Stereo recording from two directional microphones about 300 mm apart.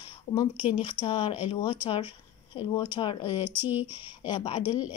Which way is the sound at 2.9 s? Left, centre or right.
Centre.